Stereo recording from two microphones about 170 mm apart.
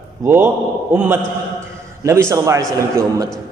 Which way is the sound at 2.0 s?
15° right (ahead or behind).